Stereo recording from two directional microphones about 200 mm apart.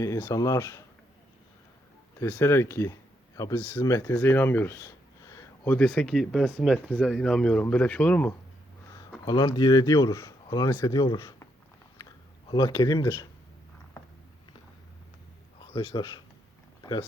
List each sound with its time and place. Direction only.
0.0 s speech: 15° left (ahead or behind)
2.1 s speech: 10° left (ahead or behind)
9.2 s speech: 20° left (ahead or behind)
12.5 s speech: 20° left (ahead or behind)
15.7 s speech: 20° left (ahead or behind)